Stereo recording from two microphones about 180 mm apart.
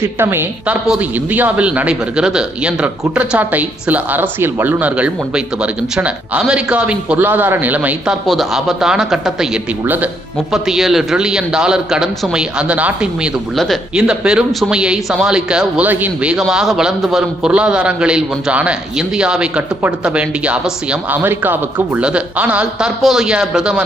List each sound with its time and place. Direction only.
0.0 s a woman's voice: 10° right (ahead or behind)